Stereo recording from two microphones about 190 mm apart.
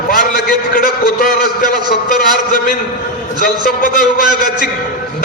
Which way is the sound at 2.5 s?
45° left (ahead or behind).